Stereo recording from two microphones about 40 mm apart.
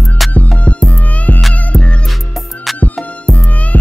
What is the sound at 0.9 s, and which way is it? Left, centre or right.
Music, left.